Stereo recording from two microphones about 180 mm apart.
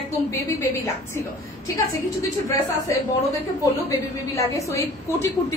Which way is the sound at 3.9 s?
15° left (ahead or behind).